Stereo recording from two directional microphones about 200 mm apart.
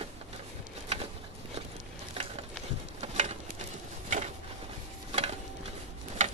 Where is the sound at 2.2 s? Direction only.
30° right (ahead or behind).